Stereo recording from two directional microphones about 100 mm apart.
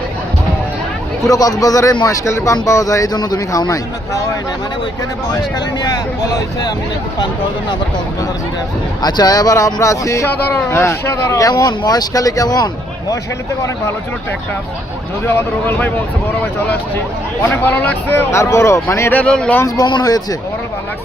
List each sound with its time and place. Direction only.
1.2 s speech: 35° left (ahead or behind)
5.8 s speech: 40° left (ahead or behind)
9.0 s speech: 45° left (ahead or behind)
11.5 s speech: 45° left (ahead or behind)
15.3 s speech: 20° left (ahead or behind)
17.5 s speech: 20° left (ahead or behind)
19.1 s speech: 10° left (ahead or behind)
19.6 s speech: 40° left (ahead or behind)